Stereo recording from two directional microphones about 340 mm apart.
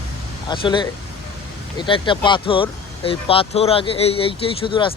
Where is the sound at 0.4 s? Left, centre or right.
Centre.